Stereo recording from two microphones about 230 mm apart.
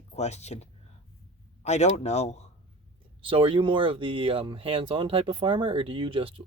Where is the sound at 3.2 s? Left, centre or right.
Right.